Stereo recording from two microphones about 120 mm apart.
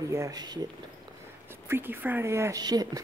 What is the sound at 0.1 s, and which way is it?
Speech, 30° right (ahead or behind).